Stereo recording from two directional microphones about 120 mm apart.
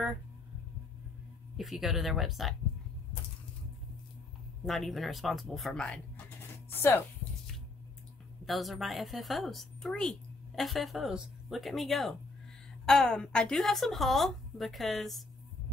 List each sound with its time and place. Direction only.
1.6 s a woman's voice: centre (ahead or behind)
4.6 s a woman's voice: centre (ahead or behind)
6.7 s speech: 20° left (ahead or behind)
8.5 s a woman's voice: centre (ahead or behind)